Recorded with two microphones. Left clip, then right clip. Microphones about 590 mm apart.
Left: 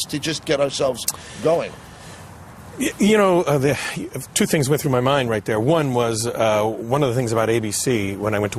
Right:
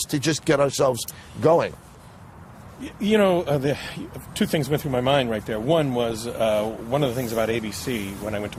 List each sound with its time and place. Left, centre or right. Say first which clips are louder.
0.0 s speech: right 1 dB; right
2.8 s speech: left 4 dB; left